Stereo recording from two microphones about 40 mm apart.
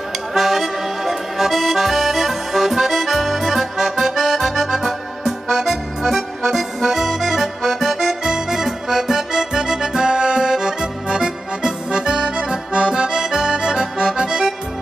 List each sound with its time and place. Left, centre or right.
0.3 s accordion: centre